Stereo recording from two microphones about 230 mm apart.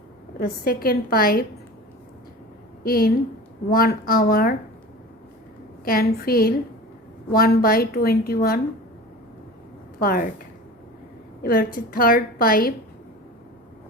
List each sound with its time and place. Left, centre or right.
0.3 s speech: left
2.8 s speech: left
5.8 s speech: left
10.0 s speech: left
11.4 s speech: left